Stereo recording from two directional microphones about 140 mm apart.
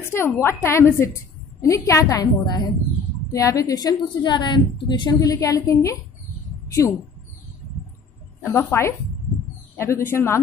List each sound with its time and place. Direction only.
0.0 s a woman's voice: 20° left (ahead or behind)
8.4 s a woman's voice: 20° left (ahead or behind)